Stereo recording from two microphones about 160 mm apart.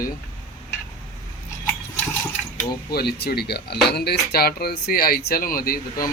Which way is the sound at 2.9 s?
80° left.